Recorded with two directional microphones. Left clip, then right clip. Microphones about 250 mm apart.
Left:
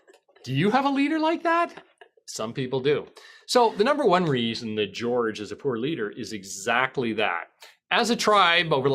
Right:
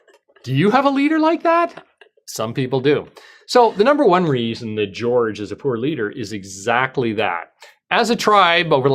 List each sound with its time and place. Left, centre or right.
0.4 s speech: right
2.2 s speech: right